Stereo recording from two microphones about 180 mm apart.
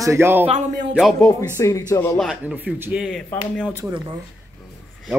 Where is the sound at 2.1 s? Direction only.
5° right (ahead or behind).